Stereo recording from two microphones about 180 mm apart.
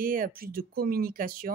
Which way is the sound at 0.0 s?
50° right (ahead or behind).